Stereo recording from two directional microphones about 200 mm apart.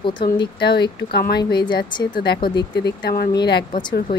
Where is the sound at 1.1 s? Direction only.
50° left (ahead or behind).